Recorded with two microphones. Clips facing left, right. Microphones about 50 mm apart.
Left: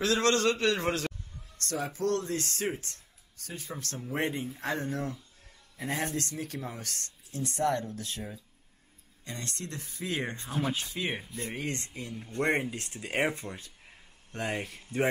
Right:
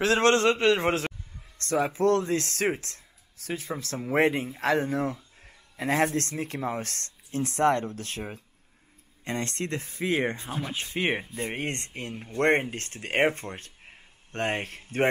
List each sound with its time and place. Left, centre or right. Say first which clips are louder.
0.0 s a man's voice: right 5 dB; right
2.3 s speech: right 6 dB; right
4.9 s speech: right 6 dB; right
5.8 s speech: right 8 dB; right
6.1 s speech: right 5 dB; right
10.3 s speech: right 1 dB; right
10.8 s a man's voice: right 6 dB; right